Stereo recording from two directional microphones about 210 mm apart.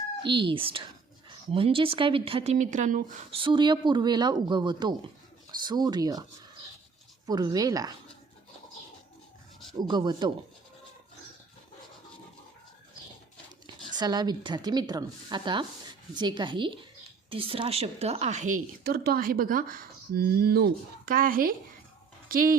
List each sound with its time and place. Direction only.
0.2 s speech: 25° right (ahead or behind)
3.4 s speech: 20° right (ahead or behind)
7.3 s speech: 20° right (ahead or behind)
9.7 s speech: 20° right (ahead or behind)
13.9 s a woman's voice: 20° right (ahead or behind); by 22.5 s 45° right (ahead or behind)